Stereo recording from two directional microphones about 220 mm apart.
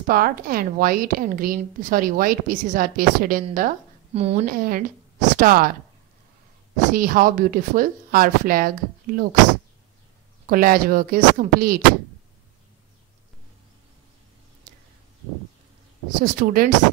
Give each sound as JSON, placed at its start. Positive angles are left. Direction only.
{"t": 0.0, "sound": "a woman's voice", "side_deg": -40}
{"t": 4.5, "sound": "a woman's voice", "side_deg": -40}
{"t": 6.9, "sound": "a woman's voice", "side_deg": -40}
{"t": 10.4, "sound": "a woman's voice", "side_deg": -40}
{"t": 16.2, "sound": "a woman's voice", "side_deg": -40}